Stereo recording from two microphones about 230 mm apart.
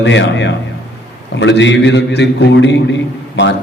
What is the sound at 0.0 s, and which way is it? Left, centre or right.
A man's voice, left.